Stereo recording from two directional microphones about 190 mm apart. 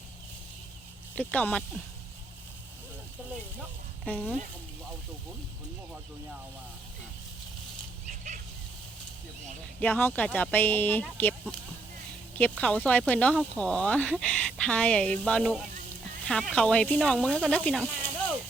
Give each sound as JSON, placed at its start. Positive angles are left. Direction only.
{"t": 1.1, "sound": "speech", "side_deg": 10}
{"t": 4.0, "sound": "speech", "side_deg": 10}
{"t": 8.0, "sound": "a sound", "side_deg": -40}
{"t": 9.8, "sound": "speech", "side_deg": 10}